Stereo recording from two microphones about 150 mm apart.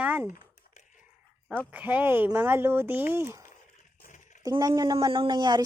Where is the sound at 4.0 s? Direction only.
55° left (ahead or behind).